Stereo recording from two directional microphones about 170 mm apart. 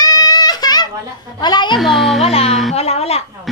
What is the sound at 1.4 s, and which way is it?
Speech, 25° left (ahead or behind).